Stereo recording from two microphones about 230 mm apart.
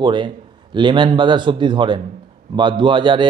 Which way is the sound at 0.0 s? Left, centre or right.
Right.